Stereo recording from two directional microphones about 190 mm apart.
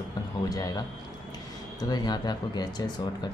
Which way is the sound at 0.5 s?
20° left (ahead or behind).